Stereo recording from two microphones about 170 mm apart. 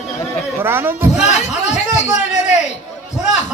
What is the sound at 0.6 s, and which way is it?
Speech, 15° right (ahead or behind).